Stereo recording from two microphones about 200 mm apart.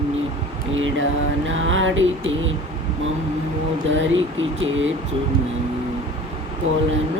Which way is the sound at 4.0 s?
75° right (ahead or behind).